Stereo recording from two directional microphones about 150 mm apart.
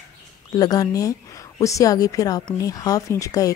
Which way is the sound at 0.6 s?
25° left (ahead or behind).